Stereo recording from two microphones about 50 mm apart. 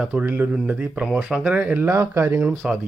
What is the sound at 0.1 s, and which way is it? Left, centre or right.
Speech, right.